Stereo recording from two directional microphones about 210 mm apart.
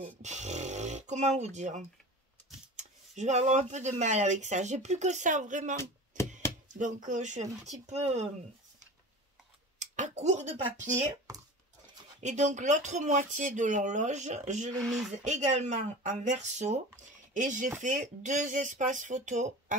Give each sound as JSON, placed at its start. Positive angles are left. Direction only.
{"t": 0.2, "sound": "a sound", "side_deg": -35}
{"t": 2.7, "sound": "speech", "side_deg": -35}
{"t": 6.1, "sound": "chopping", "side_deg": -40}
{"t": 7.1, "sound": "speech", "side_deg": -35}
{"t": 9.8, "sound": "speech", "side_deg": -35}
{"t": 11.3, "sound": "a sound", "side_deg": -15}
{"t": 12.2, "sound": "speech", "side_deg": -35}